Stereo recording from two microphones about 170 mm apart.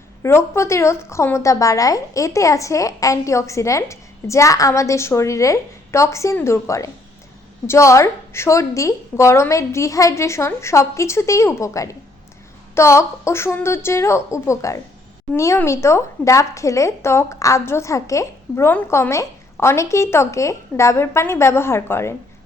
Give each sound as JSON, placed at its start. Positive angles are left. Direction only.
{"t": 0.2, "sound": "a woman's voice", "side_deg": 15}